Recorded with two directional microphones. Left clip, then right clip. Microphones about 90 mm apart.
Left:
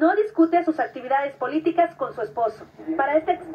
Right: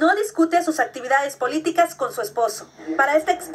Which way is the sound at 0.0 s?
40° right (ahead or behind).